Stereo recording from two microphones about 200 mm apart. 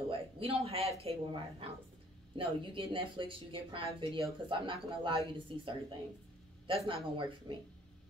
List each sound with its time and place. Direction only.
0.1 s a woman's voice: 30° right (ahead or behind)
6.9 s a woman's voice: 25° right (ahead or behind)